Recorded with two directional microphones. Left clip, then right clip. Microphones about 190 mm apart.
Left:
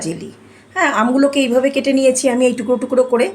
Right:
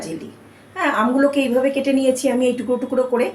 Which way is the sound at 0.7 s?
55° left (ahead or behind).